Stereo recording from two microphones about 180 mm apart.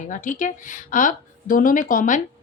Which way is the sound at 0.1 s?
45° left (ahead or behind).